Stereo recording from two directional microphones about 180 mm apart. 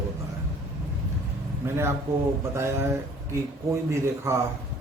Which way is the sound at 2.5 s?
15° right (ahead or behind).